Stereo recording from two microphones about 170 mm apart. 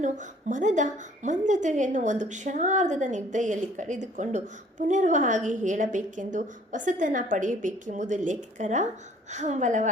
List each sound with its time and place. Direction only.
0.0 s a woman's voice: 45° right (ahead or behind)